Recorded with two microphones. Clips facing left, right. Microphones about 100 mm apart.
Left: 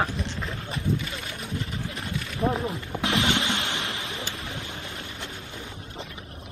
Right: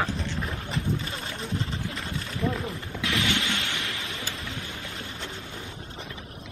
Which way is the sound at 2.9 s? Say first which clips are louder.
Left 3 dB; 25° left (ahead or behind).